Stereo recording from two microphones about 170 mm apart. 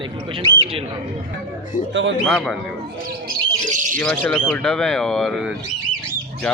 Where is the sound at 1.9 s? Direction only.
90° right.